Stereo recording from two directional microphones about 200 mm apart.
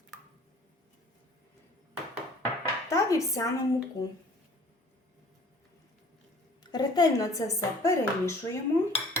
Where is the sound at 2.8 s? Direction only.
15° left (ahead or behind).